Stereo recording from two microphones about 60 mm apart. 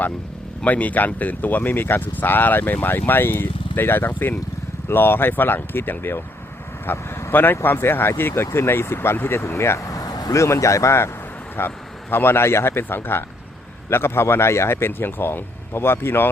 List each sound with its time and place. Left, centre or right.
0.6 s speech: left
11.6 s speech: left